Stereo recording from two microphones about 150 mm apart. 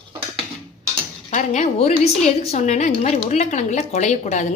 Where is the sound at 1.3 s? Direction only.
50° left (ahead or behind).